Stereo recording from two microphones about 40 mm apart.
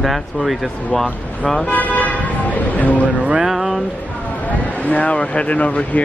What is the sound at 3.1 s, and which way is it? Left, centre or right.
Music, right.